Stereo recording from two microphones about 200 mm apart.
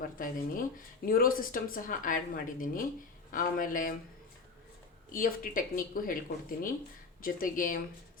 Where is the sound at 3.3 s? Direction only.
45° left (ahead or behind).